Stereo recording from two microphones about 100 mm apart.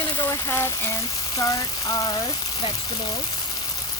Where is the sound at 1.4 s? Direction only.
35° left (ahead or behind).